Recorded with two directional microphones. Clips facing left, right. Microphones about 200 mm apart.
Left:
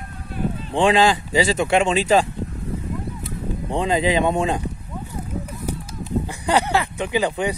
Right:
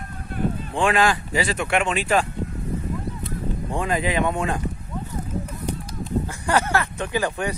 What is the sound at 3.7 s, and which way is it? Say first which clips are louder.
Speech: left 4 dB; 25° left (ahead or behind).